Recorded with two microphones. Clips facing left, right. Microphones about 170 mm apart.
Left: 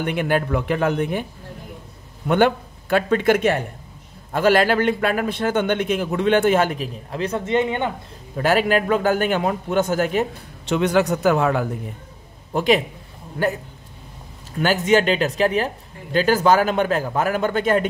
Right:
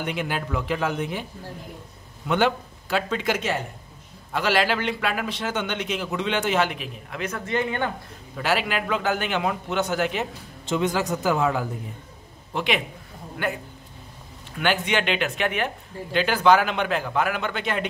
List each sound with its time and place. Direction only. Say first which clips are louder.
0.0 s a man's voice: left 7 dB; 55° left (ahead or behind)
2.2 s a man's voice: left 5 dB; 55° left (ahead or behind); by 7.9 s 20° left (ahead or behind)
8.4 s a man's voice: left 7 dB; 45° left (ahead or behind)
10.6 s a man's voice: left 6 dB; 70° left (ahead or behind)
12.5 s speech: left 7 dB; 40° left (ahead or behind)
14.6 s speech: left 7 dB; 40° left (ahead or behind)